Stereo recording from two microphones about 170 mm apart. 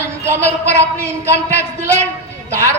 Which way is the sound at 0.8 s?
15° right (ahead or behind).